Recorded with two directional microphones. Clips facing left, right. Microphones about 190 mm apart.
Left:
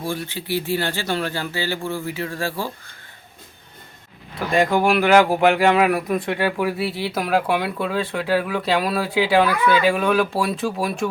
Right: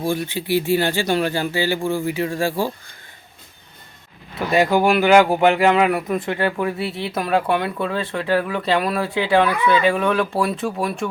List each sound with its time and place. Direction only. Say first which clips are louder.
0.0 s speech: right 5 dB; 15° right (ahead or behind)
4.4 s speech: right 2 dB; 5° right (ahead or behind)